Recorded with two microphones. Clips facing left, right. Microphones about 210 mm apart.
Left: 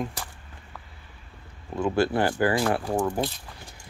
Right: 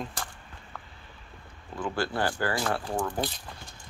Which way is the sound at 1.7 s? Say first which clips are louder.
Left 7 dB; 20° left (ahead or behind).